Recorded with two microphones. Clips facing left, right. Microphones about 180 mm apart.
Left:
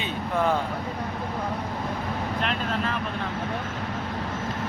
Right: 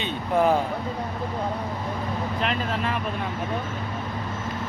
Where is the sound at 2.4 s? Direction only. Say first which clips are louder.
Right 2 dB; centre (ahead or behind).